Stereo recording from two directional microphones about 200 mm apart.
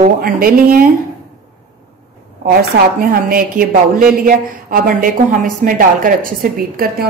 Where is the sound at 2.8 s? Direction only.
60° right (ahead or behind).